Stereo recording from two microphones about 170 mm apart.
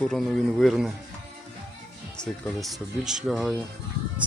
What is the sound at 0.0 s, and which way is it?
Speech, 5° left (ahead or behind).